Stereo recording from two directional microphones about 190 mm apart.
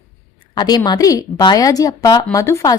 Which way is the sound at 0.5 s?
20° left (ahead or behind).